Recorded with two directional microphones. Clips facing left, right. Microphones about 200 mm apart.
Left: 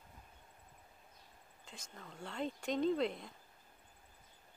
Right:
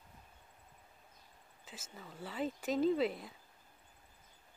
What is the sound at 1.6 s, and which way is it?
Speech, 5° right (ahead or behind).